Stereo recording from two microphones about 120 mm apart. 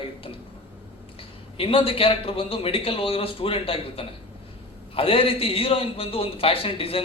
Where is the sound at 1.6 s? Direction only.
50° left (ahead or behind).